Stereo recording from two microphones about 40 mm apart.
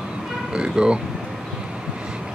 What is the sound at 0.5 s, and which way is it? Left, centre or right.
Vehicle, right.